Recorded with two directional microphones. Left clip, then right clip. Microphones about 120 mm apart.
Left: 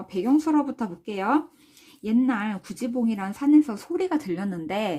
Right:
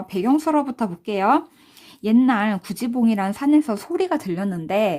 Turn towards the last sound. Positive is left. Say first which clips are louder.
# right 7 dB
turn(degrees=-30)  # may be behind; listen again after turning